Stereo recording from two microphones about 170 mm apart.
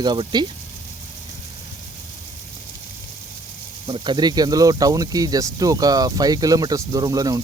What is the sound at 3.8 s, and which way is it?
Speech, 30° right (ahead or behind).